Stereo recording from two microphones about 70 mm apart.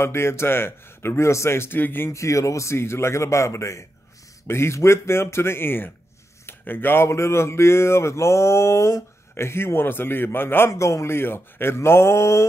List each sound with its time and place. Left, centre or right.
0.0 s speech: left
2.0 s a man's voice: left
10.7 s speech: left